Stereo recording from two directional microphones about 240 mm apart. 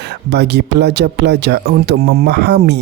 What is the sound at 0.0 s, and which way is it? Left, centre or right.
Speech, right.